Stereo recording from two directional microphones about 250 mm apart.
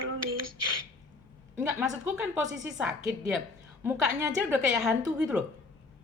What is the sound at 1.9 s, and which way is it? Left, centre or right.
A woman's voice, centre.